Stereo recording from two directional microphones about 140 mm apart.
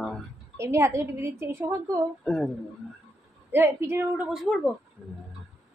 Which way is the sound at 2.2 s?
5° left (ahead or behind).